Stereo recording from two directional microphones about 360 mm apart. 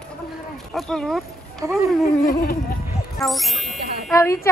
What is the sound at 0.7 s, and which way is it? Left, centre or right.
Speech, centre.